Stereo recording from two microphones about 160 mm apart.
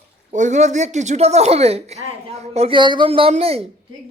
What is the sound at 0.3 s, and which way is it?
Speech, 50° right (ahead or behind).